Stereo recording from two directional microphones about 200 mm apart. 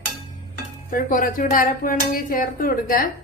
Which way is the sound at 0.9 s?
45° left (ahead or behind).